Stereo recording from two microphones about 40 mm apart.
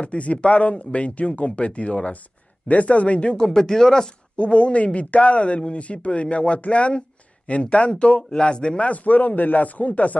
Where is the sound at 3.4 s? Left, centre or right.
Centre.